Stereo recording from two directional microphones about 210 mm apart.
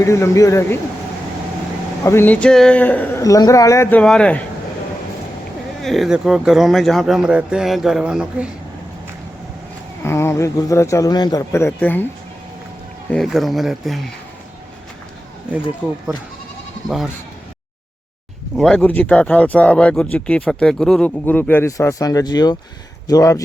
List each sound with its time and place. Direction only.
0.0 s speech: 15° left (ahead or behind)
2.0 s speech: 10° left (ahead or behind)
5.8 s speech: centre (ahead or behind)
10.0 s speech: 10° left (ahead or behind)
13.1 s speech: centre (ahead or behind)
18.5 s speech: 5° left (ahead or behind)